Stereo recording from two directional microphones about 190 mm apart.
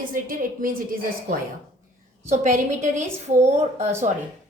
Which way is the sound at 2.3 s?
40° right (ahead or behind).